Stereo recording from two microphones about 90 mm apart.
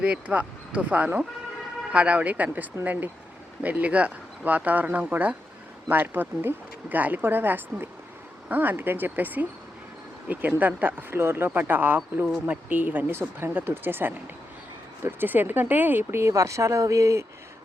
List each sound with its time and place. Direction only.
0.0 s speech: 15° right (ahead or behind); by 17.2 s 35° right (ahead or behind)